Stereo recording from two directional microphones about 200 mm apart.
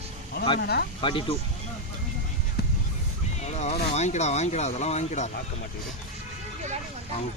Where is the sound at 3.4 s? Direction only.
35° left (ahead or behind).